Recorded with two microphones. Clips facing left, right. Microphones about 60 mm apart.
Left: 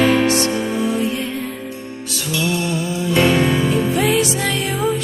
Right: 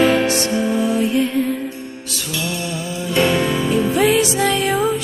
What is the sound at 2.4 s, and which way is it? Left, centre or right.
Music, left.